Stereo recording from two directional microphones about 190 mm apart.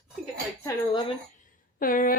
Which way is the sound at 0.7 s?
15° left (ahead or behind).